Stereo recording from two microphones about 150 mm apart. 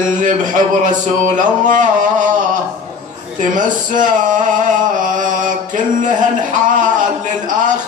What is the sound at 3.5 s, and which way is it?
A man's voice, 60° right (ahead or behind).